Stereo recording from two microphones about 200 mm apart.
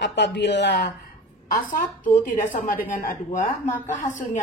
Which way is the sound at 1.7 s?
45° left (ahead or behind).